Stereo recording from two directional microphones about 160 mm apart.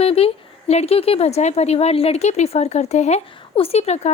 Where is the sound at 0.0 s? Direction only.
40° left (ahead or behind).